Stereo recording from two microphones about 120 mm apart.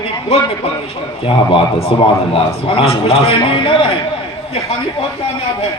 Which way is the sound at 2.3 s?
50° left (ahead or behind).